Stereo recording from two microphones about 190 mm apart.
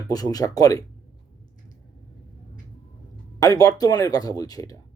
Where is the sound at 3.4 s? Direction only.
20° left (ahead or behind).